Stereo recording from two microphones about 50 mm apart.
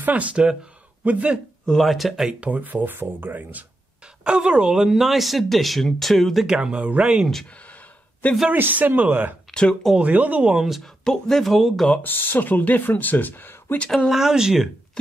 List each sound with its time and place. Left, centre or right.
0.0 s speech: right
1.8 s speech: centre
2.2 s speech: right
2.6 s speech: right
4.2 s speech: centre
6.4 s speech: centre
7.6 s a sound: left
8.5 s speech: right
9.5 s speech: centre
9.9 s speech: right
10.8 s speech: centre
12.0 s speech: left
13.8 s speech: centre
14.1 s speech: centre